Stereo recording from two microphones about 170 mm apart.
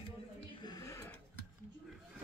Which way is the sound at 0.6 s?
20° left (ahead or behind).